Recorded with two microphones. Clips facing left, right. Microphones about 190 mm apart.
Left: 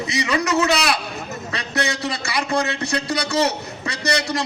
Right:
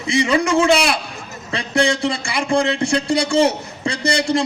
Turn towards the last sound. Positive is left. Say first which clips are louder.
# right 4 dB
turn(degrees=-30)  # may be behind; listen again after turning